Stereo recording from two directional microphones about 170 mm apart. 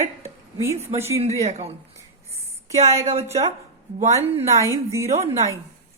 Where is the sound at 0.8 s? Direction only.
40° right (ahead or behind).